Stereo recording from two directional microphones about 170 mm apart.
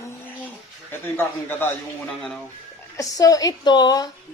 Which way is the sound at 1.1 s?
10° left (ahead or behind).